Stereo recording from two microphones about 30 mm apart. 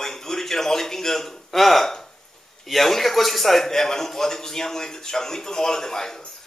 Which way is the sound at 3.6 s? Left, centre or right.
Centre.